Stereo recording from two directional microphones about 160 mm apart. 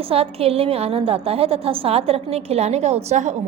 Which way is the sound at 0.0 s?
35° right (ahead or behind).